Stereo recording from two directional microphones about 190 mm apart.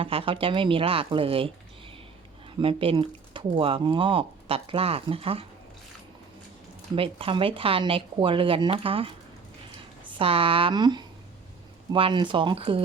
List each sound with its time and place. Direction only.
0.0 s speech: 30° right (ahead or behind)
2.6 s speech: 30° right (ahead or behind)
6.9 s speech: 30° right (ahead or behind)
10.2 s speech: 30° right (ahead or behind)